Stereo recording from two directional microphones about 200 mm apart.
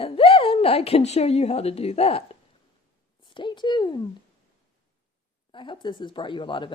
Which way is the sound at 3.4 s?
25° left (ahead or behind).